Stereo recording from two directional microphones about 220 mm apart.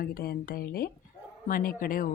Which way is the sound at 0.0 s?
45° left (ahead or behind).